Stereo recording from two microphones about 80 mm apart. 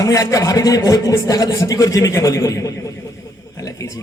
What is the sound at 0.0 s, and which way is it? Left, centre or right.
A man's voice, left.